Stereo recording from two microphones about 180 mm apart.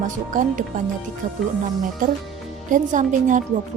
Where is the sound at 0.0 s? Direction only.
45° right (ahead or behind).